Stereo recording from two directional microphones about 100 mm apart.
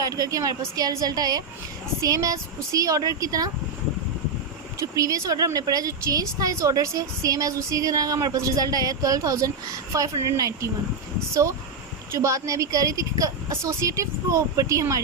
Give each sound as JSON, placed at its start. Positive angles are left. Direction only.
{"t": 0.0, "sound": "a woman's voice", "side_deg": -35}
{"t": 4.8, "sound": "a woman's voice", "side_deg": -35}
{"t": 12.1, "sound": "a woman's voice", "side_deg": -30}